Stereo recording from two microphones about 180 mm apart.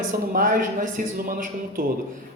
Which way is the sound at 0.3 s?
50° right (ahead or behind).